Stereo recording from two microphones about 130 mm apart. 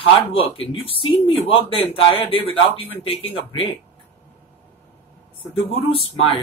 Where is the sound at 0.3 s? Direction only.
45° left (ahead or behind).